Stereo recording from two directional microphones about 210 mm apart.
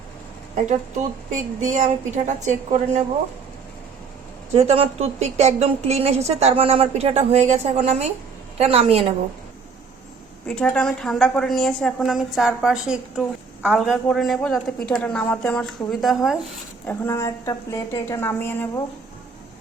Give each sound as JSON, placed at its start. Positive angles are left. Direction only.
{"t": 0.5, "sound": "a woman's voice", "side_deg": -35}
{"t": 4.5, "sound": "a woman's voice", "side_deg": -30}
{"t": 10.4, "sound": "a woman's voice", "side_deg": 5}
{"t": 16.9, "sound": "a woman's voice", "side_deg": 15}